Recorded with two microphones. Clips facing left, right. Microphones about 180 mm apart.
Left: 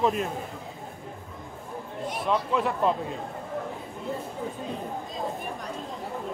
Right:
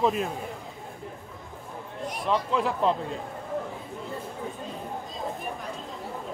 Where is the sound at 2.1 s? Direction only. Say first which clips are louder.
Even; centre (ahead or behind).